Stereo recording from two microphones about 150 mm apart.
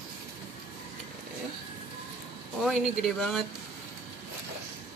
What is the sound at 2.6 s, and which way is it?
Speech, centre (ahead or behind).